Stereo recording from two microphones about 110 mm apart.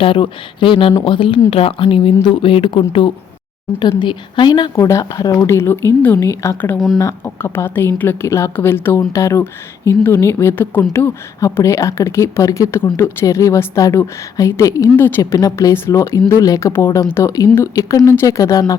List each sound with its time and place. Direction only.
0.0 s a woman's voice: 50° left (ahead or behind)
4.7 s speech: 30° left (ahead or behind)
6.7 s speech: centre (ahead or behind)
7.0 s speech: 20° left (ahead or behind)
14.9 s speech: 20° left (ahead or behind)